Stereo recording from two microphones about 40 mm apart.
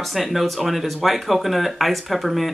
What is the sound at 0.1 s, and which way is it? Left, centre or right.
Speech, centre.